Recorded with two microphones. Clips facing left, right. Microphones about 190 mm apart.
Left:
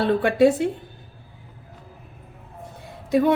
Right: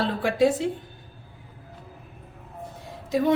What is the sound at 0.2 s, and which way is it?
Speech, 60° left (ahead or behind).